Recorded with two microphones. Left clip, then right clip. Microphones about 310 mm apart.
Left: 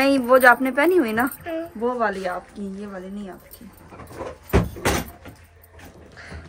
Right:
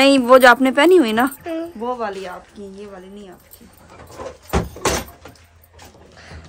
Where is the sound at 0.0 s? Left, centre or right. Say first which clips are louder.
Right 5 dB; right.